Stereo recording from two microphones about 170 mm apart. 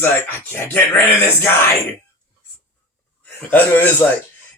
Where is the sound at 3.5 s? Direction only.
10° left (ahead or behind).